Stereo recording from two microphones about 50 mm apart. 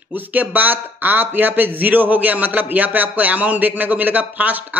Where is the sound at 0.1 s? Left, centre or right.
Right.